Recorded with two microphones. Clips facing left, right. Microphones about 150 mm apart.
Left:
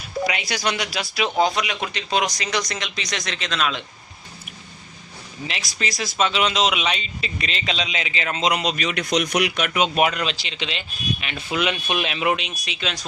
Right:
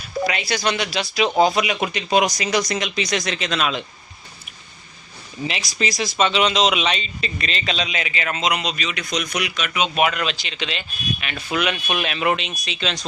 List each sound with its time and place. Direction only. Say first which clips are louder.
0.3 s speech: right 3 dB; 15° left (ahead or behind); by 3.8 s 5° right (ahead or behind)
5.5 s speech: right 4 dB; centre (ahead or behind); by 9.9 s 50° left (ahead or behind)
10.0 s speech: even; 30° left (ahead or behind); by 13.1 s 5° left (ahead or behind)